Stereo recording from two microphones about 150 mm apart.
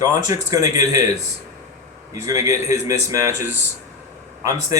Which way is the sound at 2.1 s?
20° right (ahead or behind).